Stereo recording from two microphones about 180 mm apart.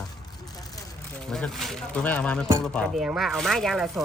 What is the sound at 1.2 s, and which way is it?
Speech, 5° left (ahead or behind).